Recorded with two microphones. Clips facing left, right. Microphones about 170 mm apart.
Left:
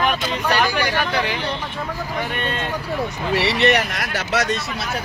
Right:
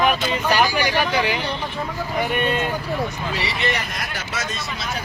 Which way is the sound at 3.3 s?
70° left (ahead or behind).